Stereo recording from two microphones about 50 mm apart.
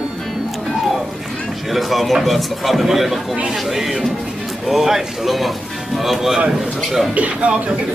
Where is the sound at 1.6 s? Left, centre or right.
Centre.